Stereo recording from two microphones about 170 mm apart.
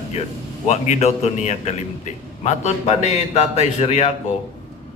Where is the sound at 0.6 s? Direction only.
40° left (ahead or behind).